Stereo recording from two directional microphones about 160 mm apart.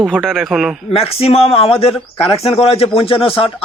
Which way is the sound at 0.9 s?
40° left (ahead or behind).